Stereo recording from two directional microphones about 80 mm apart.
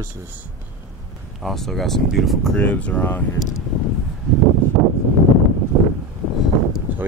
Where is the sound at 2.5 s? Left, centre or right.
Centre.